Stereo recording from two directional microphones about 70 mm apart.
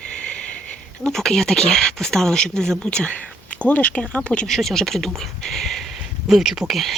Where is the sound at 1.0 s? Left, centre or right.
Centre.